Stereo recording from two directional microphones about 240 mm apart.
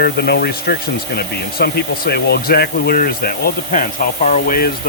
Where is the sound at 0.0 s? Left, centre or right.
Left.